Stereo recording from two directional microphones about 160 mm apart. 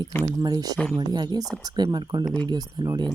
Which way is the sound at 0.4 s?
25° right (ahead or behind).